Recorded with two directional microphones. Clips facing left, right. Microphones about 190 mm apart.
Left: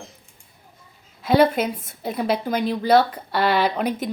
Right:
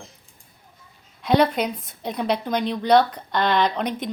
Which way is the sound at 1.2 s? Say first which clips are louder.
Left 2 dB; 5° left (ahead or behind).